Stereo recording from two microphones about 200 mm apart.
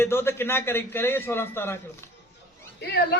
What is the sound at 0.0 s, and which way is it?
A man's voice, 10° left (ahead or behind).